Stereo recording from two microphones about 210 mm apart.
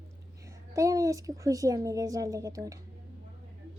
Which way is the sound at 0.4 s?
15° right (ahead or behind).